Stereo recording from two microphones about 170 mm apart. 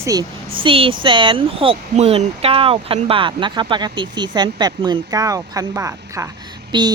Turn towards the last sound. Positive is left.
turn(degrees=-25)  # may be behind; listen again after turning